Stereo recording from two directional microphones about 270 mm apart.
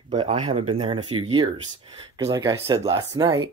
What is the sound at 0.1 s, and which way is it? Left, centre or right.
Speech, centre.